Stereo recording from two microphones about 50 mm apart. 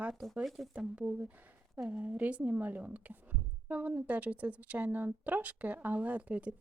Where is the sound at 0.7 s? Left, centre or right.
Right.